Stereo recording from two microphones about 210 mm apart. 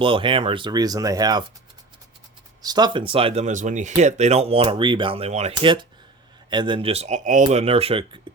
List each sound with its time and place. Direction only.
0.0 s speech: 25° right (ahead or behind)
2.6 s speech: 20° right (ahead or behind)